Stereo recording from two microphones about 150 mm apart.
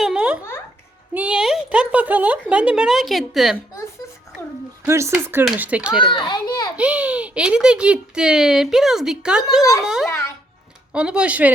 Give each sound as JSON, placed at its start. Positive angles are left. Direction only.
{"t": 0.0, "sound": "a sound", "side_deg": -5}
{"t": 1.1, "sound": "speech", "side_deg": -10}
{"t": 4.9, "sound": "speech", "side_deg": -20}
{"t": 6.0, "sound": "a child's voice", "side_deg": 30}
{"t": 6.7, "sound": "a child's voice", "side_deg": -10}
{"t": 10.1, "sound": "speech", "side_deg": 20}
{"t": 10.9, "sound": "speech", "side_deg": -5}